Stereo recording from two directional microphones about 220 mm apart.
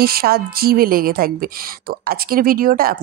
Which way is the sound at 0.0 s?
45° right (ahead or behind).